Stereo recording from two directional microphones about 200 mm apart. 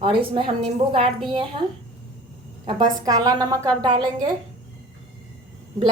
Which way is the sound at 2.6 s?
20° right (ahead or behind).